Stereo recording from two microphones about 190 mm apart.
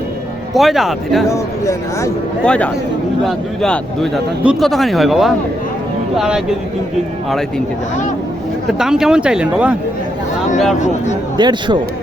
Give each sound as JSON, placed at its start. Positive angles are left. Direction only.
{"t": 0.5, "sound": "speech", "side_deg": 0}
{"t": 1.3, "sound": "speech", "side_deg": 15}
{"t": 8.8, "sound": "speech", "side_deg": -5}
{"t": 11.3, "sound": "speech", "side_deg": -20}